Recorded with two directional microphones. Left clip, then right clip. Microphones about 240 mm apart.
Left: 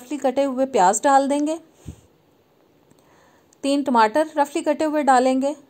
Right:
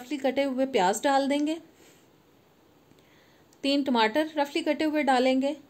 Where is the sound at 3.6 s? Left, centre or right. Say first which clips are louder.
Left 7 dB; left.